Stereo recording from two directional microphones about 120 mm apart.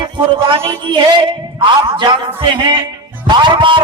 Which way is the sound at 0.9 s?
45° right (ahead or behind).